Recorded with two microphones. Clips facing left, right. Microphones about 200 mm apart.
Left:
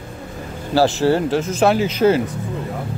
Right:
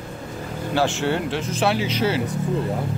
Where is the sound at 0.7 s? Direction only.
35° left (ahead or behind).